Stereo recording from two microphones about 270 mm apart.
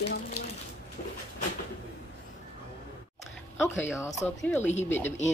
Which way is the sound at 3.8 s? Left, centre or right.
Centre.